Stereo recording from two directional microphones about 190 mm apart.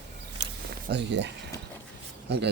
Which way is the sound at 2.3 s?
60° right (ahead or behind).